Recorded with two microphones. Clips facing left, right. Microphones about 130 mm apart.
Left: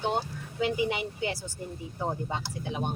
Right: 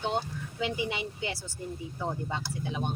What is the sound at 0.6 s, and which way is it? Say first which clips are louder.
Speech: left 4 dB; 50° left (ahead or behind).